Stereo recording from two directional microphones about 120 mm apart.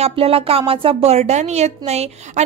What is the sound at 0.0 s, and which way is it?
A woman's voice, 50° right (ahead or behind).